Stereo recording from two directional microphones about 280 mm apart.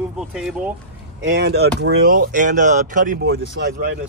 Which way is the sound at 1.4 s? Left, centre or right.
Right.